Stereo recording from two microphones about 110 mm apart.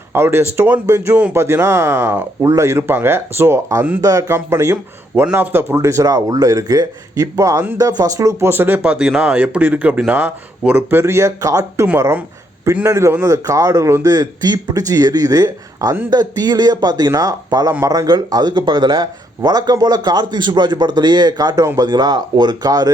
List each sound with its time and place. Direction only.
0.1 s speech: 20° right (ahead or behind)
11.9 s speech: 20° right (ahead or behind); by 22.9 s 35° right (ahead or behind)